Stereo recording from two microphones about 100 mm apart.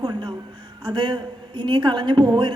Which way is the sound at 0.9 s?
45° right (ahead or behind).